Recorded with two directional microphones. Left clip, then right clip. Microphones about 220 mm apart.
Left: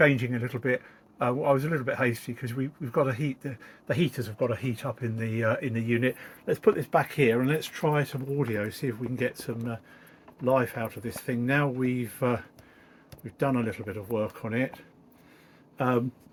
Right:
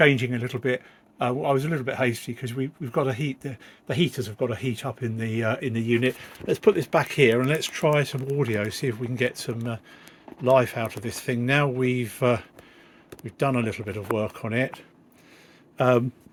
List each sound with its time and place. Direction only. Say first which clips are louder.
0.0 s speech: right 3 dB; 40° right (ahead or behind)
15.8 s speech: right 6 dB; 50° right (ahead or behind)